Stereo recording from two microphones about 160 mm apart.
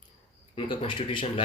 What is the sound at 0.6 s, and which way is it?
Speech, 30° left (ahead or behind).